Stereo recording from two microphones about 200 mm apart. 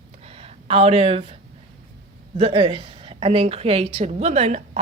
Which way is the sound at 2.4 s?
25° right (ahead or behind).